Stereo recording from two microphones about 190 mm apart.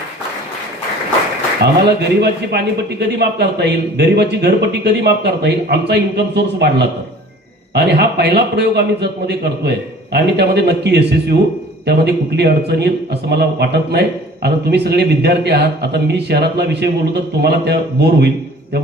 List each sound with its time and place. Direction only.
1.8 s a man's voice: 60° right (ahead or behind)